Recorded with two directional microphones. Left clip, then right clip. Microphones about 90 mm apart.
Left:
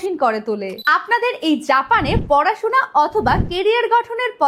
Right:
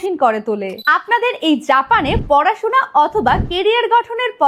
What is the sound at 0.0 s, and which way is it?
A woman's voice, 40° right (ahead or behind).